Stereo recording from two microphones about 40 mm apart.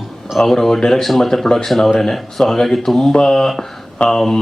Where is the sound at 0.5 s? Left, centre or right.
Centre.